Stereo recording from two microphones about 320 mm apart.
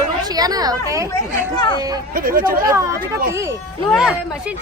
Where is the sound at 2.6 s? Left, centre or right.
Centre.